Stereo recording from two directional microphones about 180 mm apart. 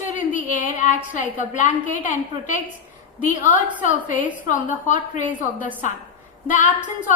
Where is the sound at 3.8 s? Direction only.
45° left (ahead or behind).